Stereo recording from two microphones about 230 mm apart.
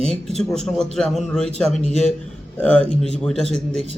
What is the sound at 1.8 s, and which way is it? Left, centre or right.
Speech, left.